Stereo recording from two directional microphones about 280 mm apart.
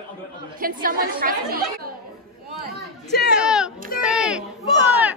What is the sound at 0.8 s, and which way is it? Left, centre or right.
A woman's voice, right.